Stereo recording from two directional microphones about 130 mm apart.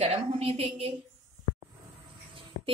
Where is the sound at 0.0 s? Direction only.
55° right (ahead or behind).